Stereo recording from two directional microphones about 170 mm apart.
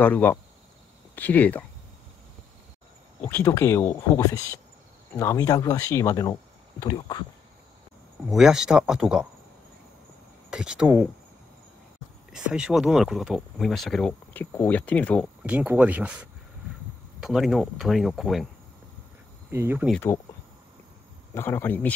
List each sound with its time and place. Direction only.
0.0 s speech: 10° left (ahead or behind)
3.3 s speech: 10° left (ahead or behind)
8.4 s speech: 5° right (ahead or behind)
10.5 s speech: 5° right (ahead or behind)
12.3 s speech: 5° right (ahead or behind)
15.4 s speech: 10° right (ahead or behind)
19.5 s speech: 15° right (ahead or behind)
21.4 s speech: 10° left (ahead or behind)